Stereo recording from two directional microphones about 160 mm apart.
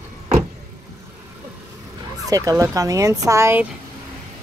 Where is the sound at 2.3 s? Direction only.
20° right (ahead or behind).